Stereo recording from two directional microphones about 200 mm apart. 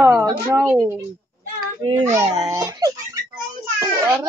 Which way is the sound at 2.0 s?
15° right (ahead or behind).